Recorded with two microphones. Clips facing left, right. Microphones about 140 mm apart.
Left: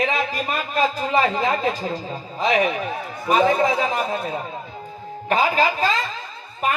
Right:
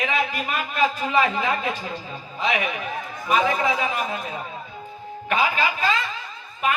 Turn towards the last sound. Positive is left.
turn(degrees=35)  # may be behind; listen again after turning